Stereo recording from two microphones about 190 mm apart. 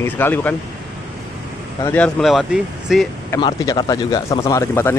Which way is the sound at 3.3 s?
20° left (ahead or behind).